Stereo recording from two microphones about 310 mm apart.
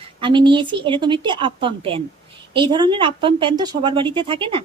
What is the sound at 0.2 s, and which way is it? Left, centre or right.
A woman's voice, centre.